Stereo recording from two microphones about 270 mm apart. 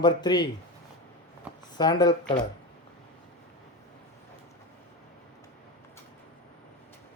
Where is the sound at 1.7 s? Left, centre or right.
Centre.